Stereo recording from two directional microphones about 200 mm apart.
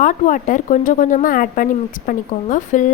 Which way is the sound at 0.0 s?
40° left (ahead or behind).